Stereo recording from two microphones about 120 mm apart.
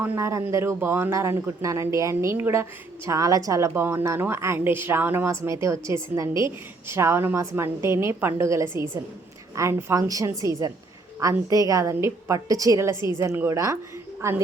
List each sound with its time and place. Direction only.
0.0 s a woman's voice: 25° right (ahead or behind)